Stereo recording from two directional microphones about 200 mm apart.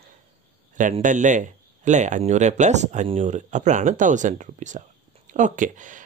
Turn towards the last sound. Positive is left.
turn(degrees=-40)  # may be behind; listen again after turning